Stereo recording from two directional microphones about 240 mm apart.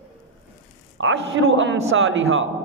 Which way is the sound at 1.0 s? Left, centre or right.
Right.